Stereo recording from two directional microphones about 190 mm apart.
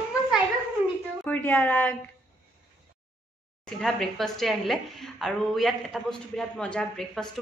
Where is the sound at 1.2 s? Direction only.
10° left (ahead or behind).